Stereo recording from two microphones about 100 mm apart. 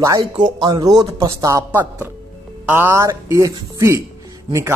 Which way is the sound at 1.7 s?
20° right (ahead or behind).